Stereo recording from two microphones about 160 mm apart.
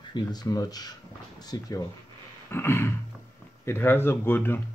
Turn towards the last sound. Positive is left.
turn(degrees=15)  # may be behind; listen again after turning